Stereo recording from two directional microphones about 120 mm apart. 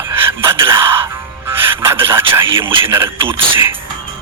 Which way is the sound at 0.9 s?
20° right (ahead or behind).